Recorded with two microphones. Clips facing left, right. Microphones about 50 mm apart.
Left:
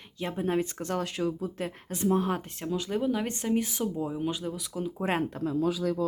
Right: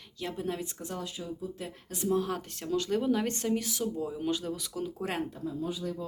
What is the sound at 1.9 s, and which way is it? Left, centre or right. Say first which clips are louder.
Speech: left 3 dB; left.